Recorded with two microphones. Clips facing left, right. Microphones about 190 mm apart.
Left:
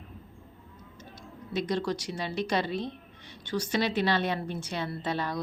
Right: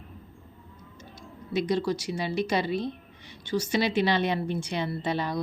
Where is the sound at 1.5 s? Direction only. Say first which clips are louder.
Right 3 dB; 10° right (ahead or behind).